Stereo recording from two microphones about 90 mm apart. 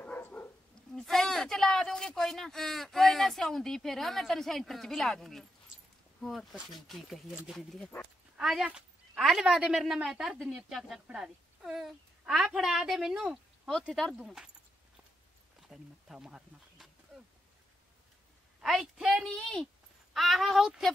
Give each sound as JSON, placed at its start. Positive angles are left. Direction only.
{"t": 0.0, "sound": "bow-wow", "side_deg": 15}
{"t": 0.9, "sound": "a woman's voice", "side_deg": 5}
{"t": 8.6, "sound": "a sound", "side_deg": -10}
{"t": 9.2, "sound": "a woman's voice", "side_deg": -5}
{"t": 14.2, "sound": "a woman's voice", "side_deg": -5}
{"t": 15.7, "sound": "a sound", "side_deg": -5}
{"t": 18.6, "sound": "a woman's voice", "side_deg": -5}